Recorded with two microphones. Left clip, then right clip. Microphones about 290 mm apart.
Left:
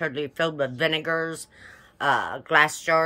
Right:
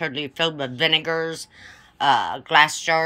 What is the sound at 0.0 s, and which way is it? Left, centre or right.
Speech, centre.